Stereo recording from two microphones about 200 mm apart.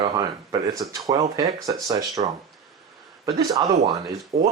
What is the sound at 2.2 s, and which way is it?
Speech, 30° right (ahead or behind).